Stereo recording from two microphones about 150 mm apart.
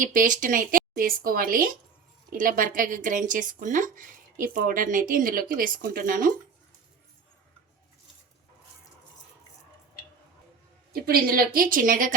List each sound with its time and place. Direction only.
0.0 s a woman's voice: 65° right (ahead or behind)
10.9 s a woman's voice: 80° right; by 12.1 s 65° right (ahead or behind)